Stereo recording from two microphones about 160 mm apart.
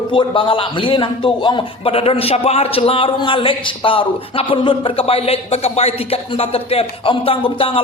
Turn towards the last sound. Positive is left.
turn(degrees=35)  # may be behind; listen again after turning